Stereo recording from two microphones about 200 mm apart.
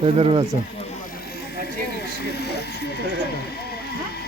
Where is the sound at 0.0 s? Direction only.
30° right (ahead or behind).